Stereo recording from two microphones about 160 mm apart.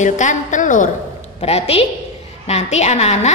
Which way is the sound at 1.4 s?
40° left (ahead or behind).